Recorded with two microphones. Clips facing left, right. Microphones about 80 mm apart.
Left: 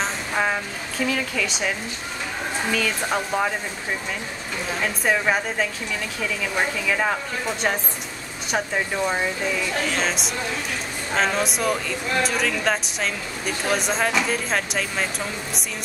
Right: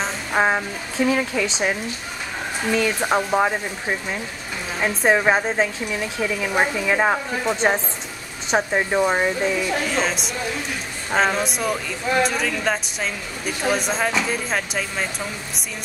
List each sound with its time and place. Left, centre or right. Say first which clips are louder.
0.3 s speech: right 6 dB; right
4.7 s speech: right 5 dB; right
9.8 s speech: right 2 dB; centre